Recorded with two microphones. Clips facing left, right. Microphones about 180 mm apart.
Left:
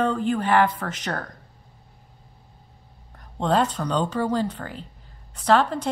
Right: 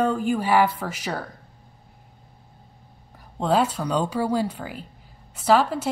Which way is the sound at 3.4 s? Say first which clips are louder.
Even; 5° right (ahead or behind).